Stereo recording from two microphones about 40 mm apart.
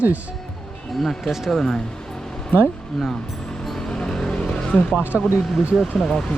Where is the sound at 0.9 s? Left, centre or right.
Centre.